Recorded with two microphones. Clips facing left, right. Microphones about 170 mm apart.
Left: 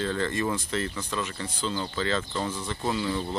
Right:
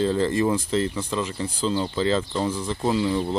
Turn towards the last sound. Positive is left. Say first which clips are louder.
# right 6 dB
turn(degrees=-25)  # may be behind; listen again after turning